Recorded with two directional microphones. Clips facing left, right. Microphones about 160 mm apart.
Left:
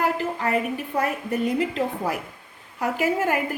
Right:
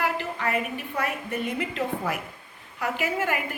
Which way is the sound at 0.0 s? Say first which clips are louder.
Left 3 dB; 35° left (ahead or behind).